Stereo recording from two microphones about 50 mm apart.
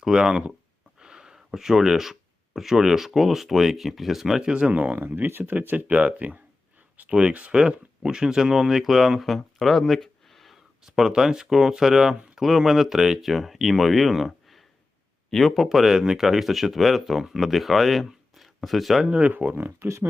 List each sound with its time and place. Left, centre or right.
0.0 s speech: centre
0.9 s a sound: centre
3.1 s speech: centre
4.4 s speech: centre
4.7 s speech: right
4.9 s speech: right
7.1 s speech: centre
10.8 s speech: centre
19.5 s speech: right